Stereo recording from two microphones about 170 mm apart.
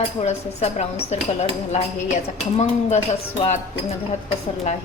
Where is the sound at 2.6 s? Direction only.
40° left (ahead or behind).